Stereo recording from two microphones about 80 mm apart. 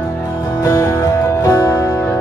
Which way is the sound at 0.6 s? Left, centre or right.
Left.